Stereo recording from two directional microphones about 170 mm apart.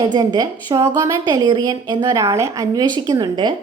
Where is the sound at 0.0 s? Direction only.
25° right (ahead or behind).